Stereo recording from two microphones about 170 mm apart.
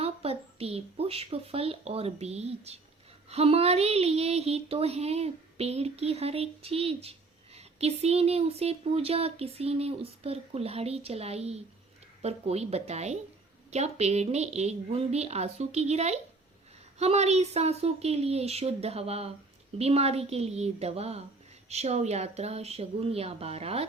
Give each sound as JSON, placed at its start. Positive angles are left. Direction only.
{"t": 0.0, "sound": "speech", "side_deg": -35}